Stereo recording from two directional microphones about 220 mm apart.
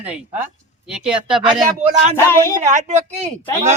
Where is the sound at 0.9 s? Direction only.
5° right (ahead or behind).